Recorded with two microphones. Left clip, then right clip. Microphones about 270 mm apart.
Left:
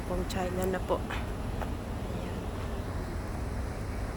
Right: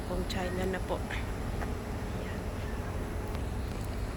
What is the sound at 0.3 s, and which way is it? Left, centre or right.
Speech, centre.